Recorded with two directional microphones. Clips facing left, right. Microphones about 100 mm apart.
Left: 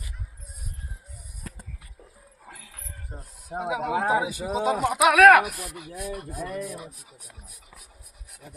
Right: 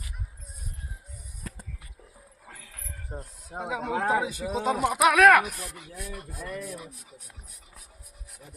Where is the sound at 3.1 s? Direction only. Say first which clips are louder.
Right 5 dB; 15° right (ahead or behind).